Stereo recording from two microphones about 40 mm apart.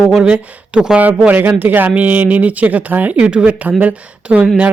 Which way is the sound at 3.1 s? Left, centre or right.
Right.